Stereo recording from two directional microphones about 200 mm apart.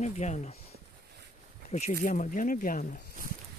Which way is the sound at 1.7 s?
40° left (ahead or behind).